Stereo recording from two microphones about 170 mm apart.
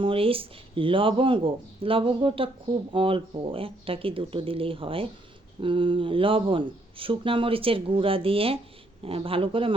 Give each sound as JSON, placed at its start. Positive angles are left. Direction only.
{"t": 0.0, "sound": "speech", "side_deg": -30}